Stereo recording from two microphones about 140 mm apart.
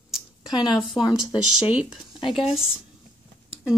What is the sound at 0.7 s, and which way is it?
Speech, 30° left (ahead or behind).